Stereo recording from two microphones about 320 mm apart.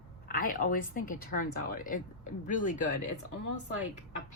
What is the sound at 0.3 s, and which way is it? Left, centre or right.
Speech, left.